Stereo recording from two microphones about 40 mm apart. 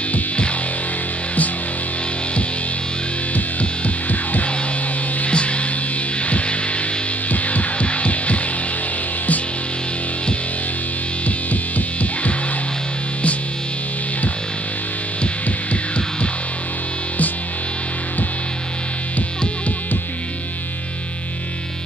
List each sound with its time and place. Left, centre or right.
3.3 s music: left
5.2 s mains hum: left
6.2 s music: left
12.0 s music: left